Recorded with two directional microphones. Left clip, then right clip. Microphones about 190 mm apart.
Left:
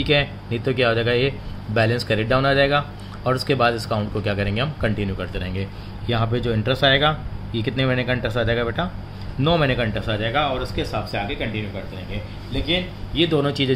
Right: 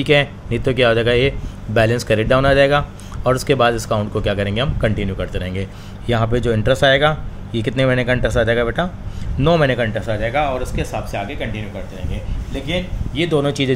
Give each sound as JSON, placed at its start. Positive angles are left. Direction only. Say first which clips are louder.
{"t": 0.0, "sound": "a man's voice", "louder": "right 5 dB", "side_deg": -30}
{"t": 12.5, "sound": "a man's voice", "louder": "even", "side_deg": -25}